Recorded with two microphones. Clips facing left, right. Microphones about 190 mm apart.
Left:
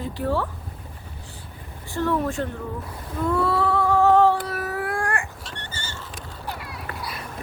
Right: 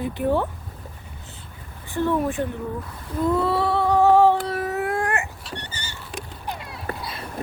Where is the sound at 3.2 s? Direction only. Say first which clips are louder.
Right 1 dB; 15° right (ahead or behind).